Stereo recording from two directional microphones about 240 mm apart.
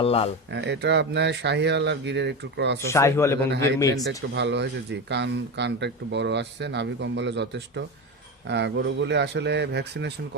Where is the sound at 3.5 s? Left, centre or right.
Right.